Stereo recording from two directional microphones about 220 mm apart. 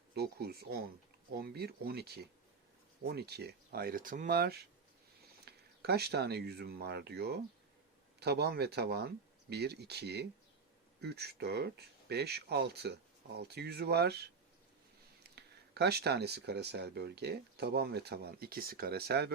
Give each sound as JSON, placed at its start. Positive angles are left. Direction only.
{"t": 0.1, "sound": "speech", "side_deg": -45}